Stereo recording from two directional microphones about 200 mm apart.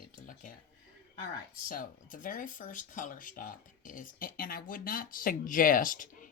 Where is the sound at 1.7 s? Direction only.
45° left (ahead or behind).